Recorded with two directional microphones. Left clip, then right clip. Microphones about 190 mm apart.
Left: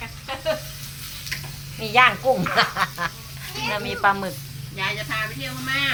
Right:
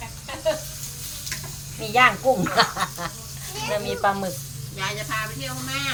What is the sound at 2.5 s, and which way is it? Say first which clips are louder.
Speech: left 1 dB; 20° left (ahead or behind).